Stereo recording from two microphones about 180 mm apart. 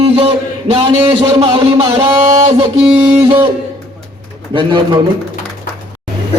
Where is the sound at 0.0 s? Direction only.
35° right (ahead or behind).